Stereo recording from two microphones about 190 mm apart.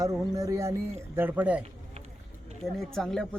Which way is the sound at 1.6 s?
35° right (ahead or behind).